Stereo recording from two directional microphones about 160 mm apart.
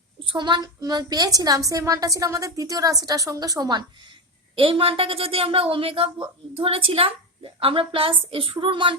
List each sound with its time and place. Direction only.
0.3 s a woman's voice: 30° right (ahead or behind)